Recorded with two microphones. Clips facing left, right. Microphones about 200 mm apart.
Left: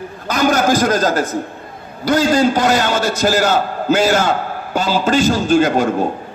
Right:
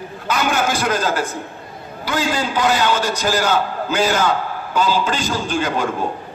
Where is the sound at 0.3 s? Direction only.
40° left (ahead or behind).